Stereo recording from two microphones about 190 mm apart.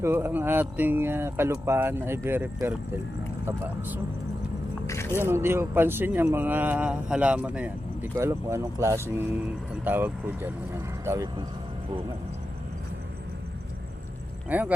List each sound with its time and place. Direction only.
0.0 s speech: 10° right (ahead or behind)
4.9 s a sound: 15° left (ahead or behind)
5.2 s speech: 10° right (ahead or behind)
14.5 s speech: 10° right (ahead or behind)